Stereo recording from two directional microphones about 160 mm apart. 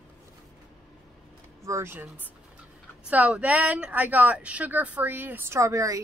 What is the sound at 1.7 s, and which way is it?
Speech, 15° right (ahead or behind).